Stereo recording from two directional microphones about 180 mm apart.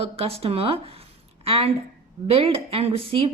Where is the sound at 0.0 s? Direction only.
35° right (ahead or behind).